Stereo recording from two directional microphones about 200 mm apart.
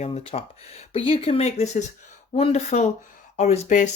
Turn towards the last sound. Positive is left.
turn(degrees=40)  # may be behind; listen again after turning